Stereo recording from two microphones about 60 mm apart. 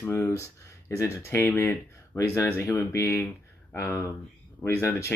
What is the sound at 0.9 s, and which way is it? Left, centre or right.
Speech, left.